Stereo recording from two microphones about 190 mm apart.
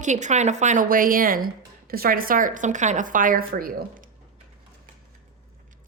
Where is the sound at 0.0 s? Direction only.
40° right (ahead or behind).